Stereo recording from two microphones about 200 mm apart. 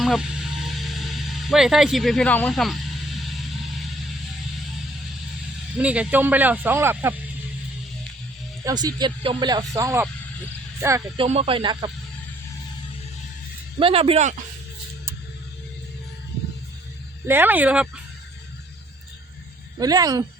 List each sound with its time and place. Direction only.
0.0 s a sound: centre (ahead or behind)
5.7 s speech: 5° right (ahead or behind)
8.6 s speech: 20° right (ahead or behind)
11.2 s speech: 30° right (ahead or behind)
13.7 s speech: 30° right (ahead or behind)
17.2 s speech: 10° right (ahead or behind)
19.8 s speech: 20° right (ahead or behind)